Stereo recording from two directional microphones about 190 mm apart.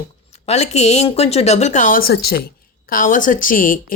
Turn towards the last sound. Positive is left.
turn(degrees=45)  # may be behind; listen again after turning